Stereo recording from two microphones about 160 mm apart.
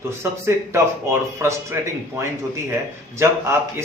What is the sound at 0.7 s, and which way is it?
A man's voice, 15° right (ahead or behind).